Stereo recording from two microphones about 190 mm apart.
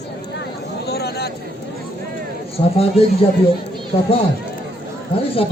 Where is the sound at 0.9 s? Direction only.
55° left (ahead or behind).